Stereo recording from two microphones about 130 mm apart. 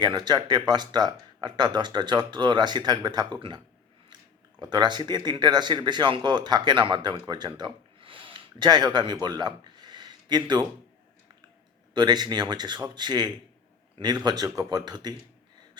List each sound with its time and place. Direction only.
0.0 s speech: 35° right (ahead or behind)
4.7 s speech: 35° right (ahead or behind)
9.2 s a sound: 35° right (ahead or behind)
11.9 s speech: 35° right (ahead or behind)